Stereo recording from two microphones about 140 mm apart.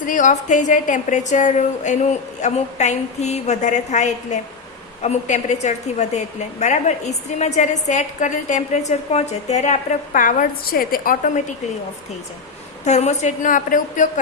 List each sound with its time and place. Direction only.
0.0 s a woman's voice: 65° left (ahead or behind)
12.8 s a woman's voice: 55° left (ahead or behind)